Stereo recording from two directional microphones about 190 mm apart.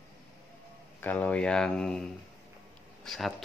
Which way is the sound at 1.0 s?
10° left (ahead or behind).